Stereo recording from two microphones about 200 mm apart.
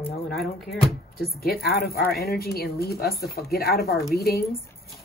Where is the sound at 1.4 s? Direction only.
50° left (ahead or behind).